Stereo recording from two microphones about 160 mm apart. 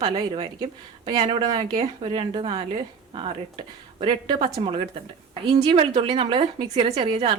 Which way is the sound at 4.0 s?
30° right (ahead or behind).